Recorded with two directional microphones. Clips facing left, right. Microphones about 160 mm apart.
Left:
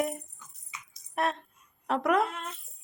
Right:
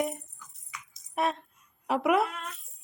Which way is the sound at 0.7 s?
25° left (ahead or behind).